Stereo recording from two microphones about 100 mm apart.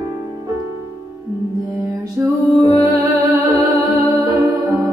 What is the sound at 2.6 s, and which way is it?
Music, 35° right (ahead or behind).